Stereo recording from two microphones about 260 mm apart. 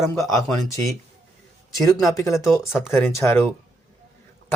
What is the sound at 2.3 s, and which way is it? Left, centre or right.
Speech, centre.